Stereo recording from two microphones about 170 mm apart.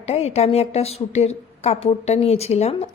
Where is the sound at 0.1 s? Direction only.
40° left (ahead or behind).